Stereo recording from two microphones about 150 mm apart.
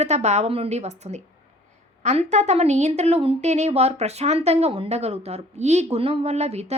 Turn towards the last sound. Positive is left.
turn(degrees=-45)  # may be behind; listen again after turning